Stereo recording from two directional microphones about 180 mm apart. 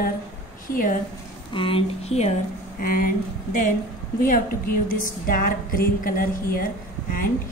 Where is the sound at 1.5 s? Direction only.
30° left (ahead or behind).